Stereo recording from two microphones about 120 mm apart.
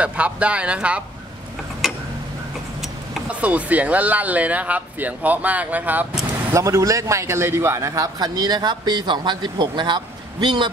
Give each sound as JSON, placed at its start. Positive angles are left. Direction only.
{"t": 0.0, "sound": "speech", "side_deg": -10}
{"t": 1.8, "sound": "tick-tock", "side_deg": 0}
{"t": 3.3, "sound": "speech", "side_deg": -10}
{"t": 6.5, "sound": "a man's voice", "side_deg": -25}